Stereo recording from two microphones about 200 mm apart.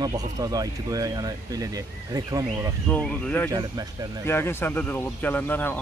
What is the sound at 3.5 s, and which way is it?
Speech, 20° right (ahead or behind).